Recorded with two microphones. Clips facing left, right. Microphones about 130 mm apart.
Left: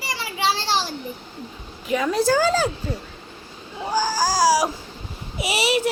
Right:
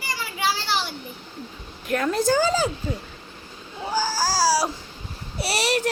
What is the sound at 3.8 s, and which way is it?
Baby cry, 15° left (ahead or behind).